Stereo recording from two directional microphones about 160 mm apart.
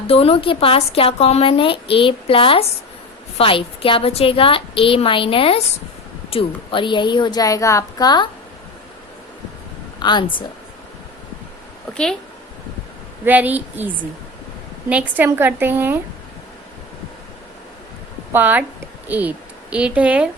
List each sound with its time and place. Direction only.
0.1 s a woman's voice: 35° left (ahead or behind)
10.0 s a woman's voice: 25° left (ahead or behind)
13.2 s a woman's voice: 10° right (ahead or behind)
18.3 s a woman's voice: 10° right (ahead or behind)